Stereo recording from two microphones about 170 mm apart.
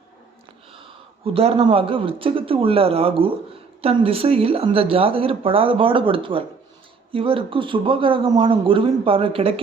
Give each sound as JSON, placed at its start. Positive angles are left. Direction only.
{"t": 1.2, "sound": "speech", "side_deg": -35}